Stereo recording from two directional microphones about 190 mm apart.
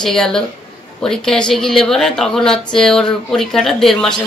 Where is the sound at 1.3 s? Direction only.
Centre (ahead or behind).